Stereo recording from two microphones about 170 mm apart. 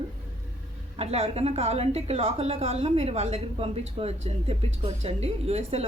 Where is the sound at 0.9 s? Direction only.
35° right (ahead or behind).